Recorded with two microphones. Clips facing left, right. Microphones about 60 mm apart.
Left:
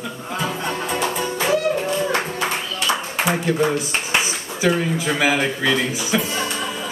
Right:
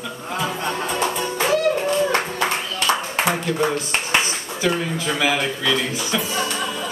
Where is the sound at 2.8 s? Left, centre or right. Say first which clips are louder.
Right 2 dB; right.